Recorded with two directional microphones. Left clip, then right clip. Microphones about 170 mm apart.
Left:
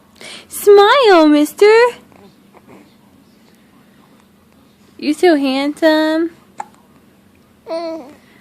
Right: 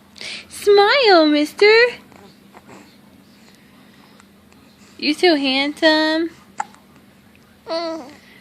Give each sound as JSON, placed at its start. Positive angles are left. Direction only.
{"t": 0.2, "sound": "speech", "side_deg": 35}
{"t": 4.9, "sound": "speech", "side_deg": 40}
{"t": 7.7, "sound": "babbling", "side_deg": 10}